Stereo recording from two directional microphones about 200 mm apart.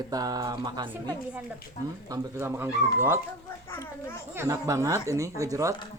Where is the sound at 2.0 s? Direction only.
15° right (ahead or behind).